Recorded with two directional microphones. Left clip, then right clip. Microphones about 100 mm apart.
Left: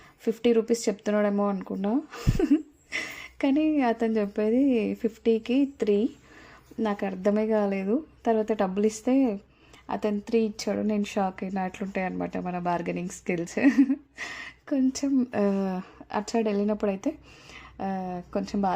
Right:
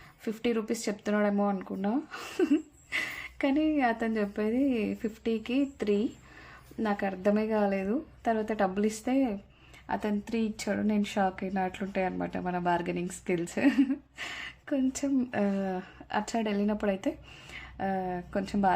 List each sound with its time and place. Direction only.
0.3 s a woman's voice: 35° left (ahead or behind)